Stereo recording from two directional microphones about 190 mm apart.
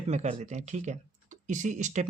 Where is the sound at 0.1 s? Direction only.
35° right (ahead or behind).